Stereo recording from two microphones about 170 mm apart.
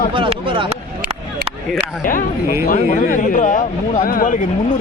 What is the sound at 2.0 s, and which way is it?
A man's voice, 55° left (ahead or behind).